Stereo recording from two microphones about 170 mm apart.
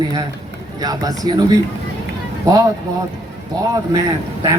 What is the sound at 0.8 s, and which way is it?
Speech, 20° right (ahead or behind).